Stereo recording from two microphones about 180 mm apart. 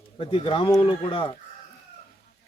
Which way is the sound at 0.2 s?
30° left (ahead or behind).